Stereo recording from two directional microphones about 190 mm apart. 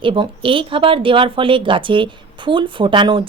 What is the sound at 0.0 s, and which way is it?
Speech, 25° right (ahead or behind).